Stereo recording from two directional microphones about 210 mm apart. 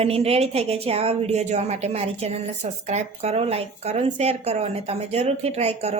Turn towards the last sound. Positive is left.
turn(degrees=-30)  # may be behind; listen again after turning